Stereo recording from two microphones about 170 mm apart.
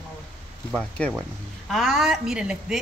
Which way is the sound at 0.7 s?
5° left (ahead or behind).